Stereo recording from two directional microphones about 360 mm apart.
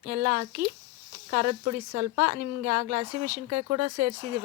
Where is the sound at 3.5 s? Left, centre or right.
Right.